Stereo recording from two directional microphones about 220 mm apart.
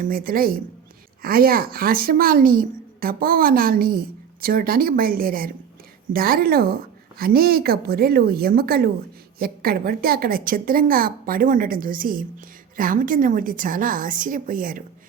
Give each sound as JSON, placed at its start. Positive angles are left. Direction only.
{"t": 0.0, "sound": "a woman's voice", "side_deg": -40}